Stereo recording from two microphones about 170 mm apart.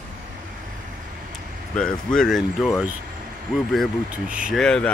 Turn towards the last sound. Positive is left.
turn(degrees=5)  # may be behind; listen again after turning